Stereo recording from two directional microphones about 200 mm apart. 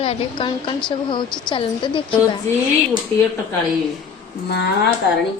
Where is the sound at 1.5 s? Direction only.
25° left (ahead or behind).